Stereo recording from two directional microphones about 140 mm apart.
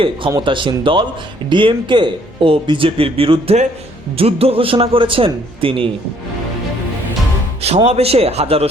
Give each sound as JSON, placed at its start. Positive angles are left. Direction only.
{"t": 0.3, "sound": "speech", "side_deg": -30}
{"t": 7.9, "sound": "a man's voice", "side_deg": -45}